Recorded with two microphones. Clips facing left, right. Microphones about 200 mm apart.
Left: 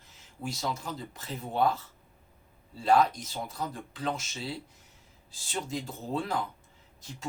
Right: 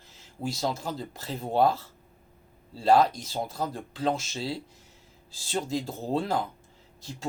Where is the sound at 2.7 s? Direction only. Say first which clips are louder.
Right 3 dB; 35° right (ahead or behind).